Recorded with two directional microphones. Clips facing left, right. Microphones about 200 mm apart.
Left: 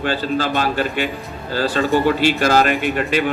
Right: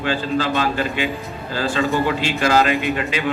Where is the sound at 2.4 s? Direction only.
50° left (ahead or behind).